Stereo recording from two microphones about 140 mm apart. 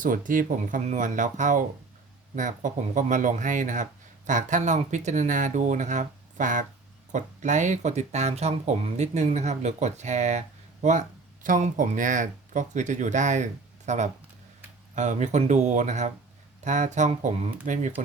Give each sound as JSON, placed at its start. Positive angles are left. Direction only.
{"t": 0.0, "sound": "speech", "side_deg": -70}
{"t": 11.4, "sound": "speech", "side_deg": -65}